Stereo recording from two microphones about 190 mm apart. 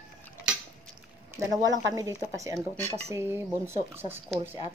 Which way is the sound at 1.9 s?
15° right (ahead or behind).